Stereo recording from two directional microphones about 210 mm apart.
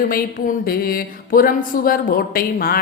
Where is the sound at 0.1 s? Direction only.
40° left (ahead or behind).